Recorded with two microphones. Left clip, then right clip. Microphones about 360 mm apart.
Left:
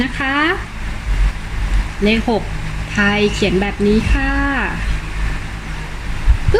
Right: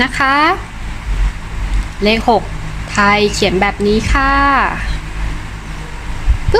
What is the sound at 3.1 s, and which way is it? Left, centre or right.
Speech, centre.